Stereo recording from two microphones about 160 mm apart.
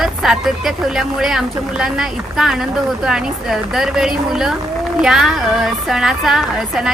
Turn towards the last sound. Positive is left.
turn(degrees=-5)  # may be behind; listen again after turning